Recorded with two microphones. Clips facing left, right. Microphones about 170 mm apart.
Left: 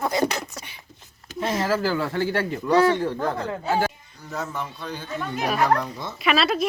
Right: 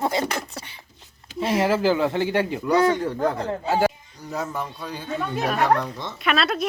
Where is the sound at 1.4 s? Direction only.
10° right (ahead or behind).